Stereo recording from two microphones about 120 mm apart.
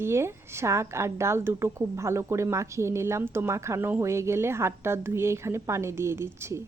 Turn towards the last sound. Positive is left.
turn(degrees=-20)  # may be behind; listen again after turning